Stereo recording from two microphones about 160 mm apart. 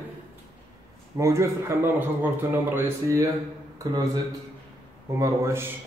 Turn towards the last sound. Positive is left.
turn(degrees=-15)  # may be behind; listen again after turning